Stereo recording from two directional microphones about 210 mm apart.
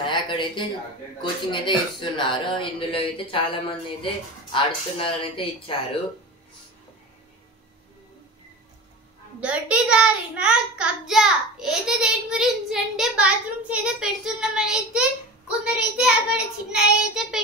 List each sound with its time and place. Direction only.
0.0 s speech: 20° left (ahead or behind)
9.4 s a child's voice: 5° right (ahead or behind)